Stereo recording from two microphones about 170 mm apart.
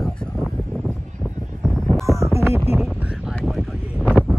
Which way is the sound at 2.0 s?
15° right (ahead or behind).